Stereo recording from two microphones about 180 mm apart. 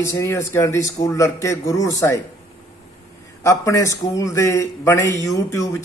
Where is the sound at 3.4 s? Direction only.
15° left (ahead or behind).